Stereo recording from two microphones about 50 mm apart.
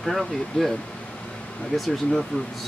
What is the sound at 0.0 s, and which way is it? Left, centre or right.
Speech, centre.